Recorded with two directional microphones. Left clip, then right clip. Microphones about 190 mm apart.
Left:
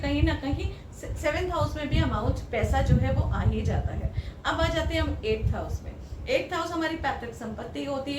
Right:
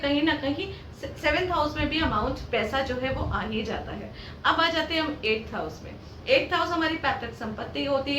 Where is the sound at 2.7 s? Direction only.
Centre (ahead or behind).